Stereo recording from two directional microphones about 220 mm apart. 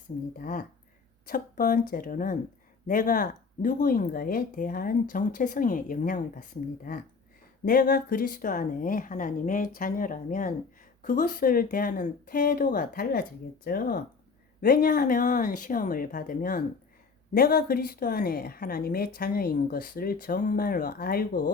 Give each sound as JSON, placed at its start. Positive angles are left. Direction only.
{"t": 0.3, "sound": "speech", "side_deg": 40}